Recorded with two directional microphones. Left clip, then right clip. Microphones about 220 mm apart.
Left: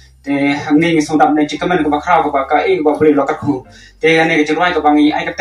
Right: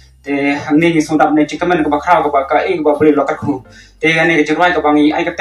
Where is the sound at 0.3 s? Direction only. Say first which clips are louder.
Even; 35° right (ahead or behind).